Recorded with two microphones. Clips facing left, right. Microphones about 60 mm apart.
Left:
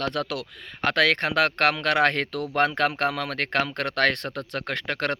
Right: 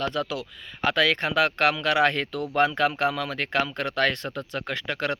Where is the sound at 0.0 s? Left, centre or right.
Left.